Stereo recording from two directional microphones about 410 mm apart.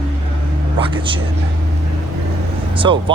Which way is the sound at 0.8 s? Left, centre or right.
Centre.